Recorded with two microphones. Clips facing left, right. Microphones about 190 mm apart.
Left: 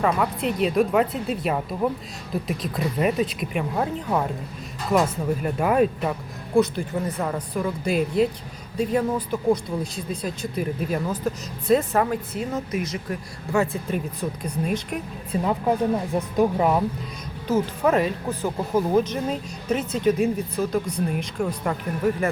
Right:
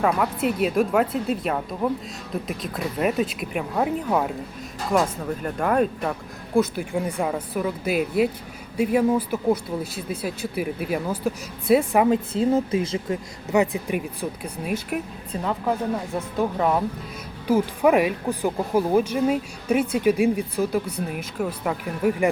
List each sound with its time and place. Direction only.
0.0 s speech: centre (ahead or behind)
4.9 s speech: 5° left (ahead or behind)
6.9 s speech: 10° right (ahead or behind)
12.1 s speech: 25° right (ahead or behind); by 15.0 s 5° right (ahead or behind)
15.3 s speech: 10° left (ahead or behind)
17.5 s speech: 10° right (ahead or behind)